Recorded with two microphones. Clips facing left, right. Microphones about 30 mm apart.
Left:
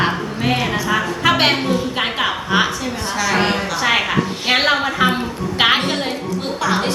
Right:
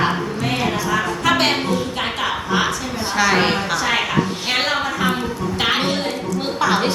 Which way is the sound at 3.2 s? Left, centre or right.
Centre.